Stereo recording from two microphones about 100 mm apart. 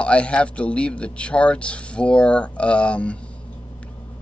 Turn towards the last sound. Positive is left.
turn(degrees=10)  # may be behind; listen again after turning